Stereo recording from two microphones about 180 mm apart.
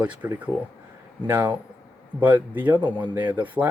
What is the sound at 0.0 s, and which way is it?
Speech, 10° right (ahead or behind).